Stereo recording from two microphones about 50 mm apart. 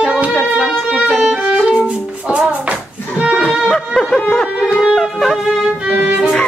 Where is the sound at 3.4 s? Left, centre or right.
Centre.